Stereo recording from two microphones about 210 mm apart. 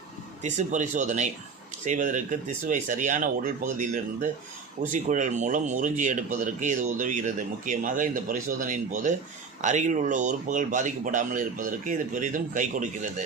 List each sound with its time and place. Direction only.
0.4 s speech: 35° right (ahead or behind)